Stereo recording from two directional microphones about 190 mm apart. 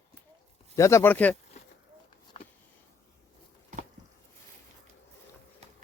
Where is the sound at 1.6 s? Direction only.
35° left (ahead or behind).